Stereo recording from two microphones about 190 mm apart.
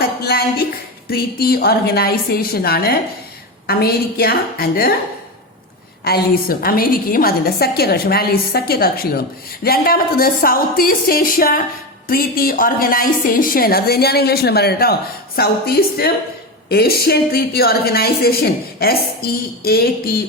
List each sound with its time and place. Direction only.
0.2 s a sound: 55° left (ahead or behind)
1.0 s a woman's voice: 50° left (ahead or behind)
6.1 s a woman's voice: 55° left (ahead or behind)